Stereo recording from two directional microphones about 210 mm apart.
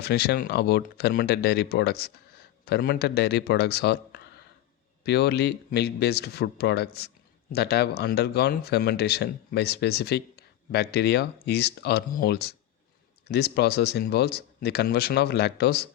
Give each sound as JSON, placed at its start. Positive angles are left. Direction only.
{"t": 0.0, "sound": "speech", "side_deg": 50}